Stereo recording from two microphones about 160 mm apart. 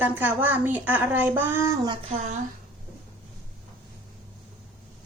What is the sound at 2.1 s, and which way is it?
Speech, 45° right (ahead or behind).